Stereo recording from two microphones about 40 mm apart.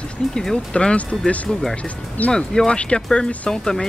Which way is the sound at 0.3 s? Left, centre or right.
Centre.